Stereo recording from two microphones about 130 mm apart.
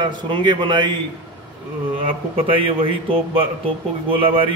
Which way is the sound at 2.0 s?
45° right (ahead or behind).